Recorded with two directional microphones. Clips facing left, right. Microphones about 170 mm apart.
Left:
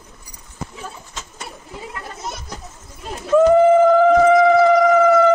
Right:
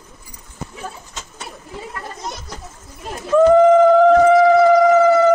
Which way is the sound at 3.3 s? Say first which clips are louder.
Right 1 dB; 5° left (ahead or behind).